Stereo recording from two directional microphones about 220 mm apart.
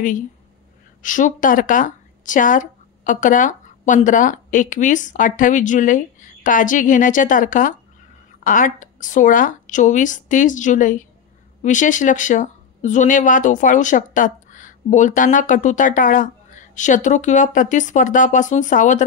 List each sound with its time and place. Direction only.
1.0 s speech: 35° left (ahead or behind)